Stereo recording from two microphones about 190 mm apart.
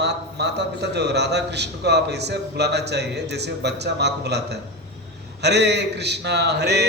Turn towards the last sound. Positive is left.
turn(degrees=-60)  # may be behind; listen again after turning